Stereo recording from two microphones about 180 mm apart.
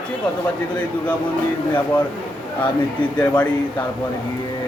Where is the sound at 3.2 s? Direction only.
10° left (ahead or behind).